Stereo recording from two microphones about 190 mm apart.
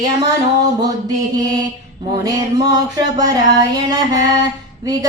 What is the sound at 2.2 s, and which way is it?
Speech, 20° right (ahead or behind).